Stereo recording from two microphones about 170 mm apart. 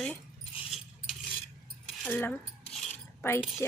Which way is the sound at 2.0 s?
10° left (ahead or behind).